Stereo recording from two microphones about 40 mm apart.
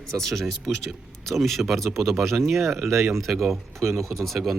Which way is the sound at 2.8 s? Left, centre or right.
Right.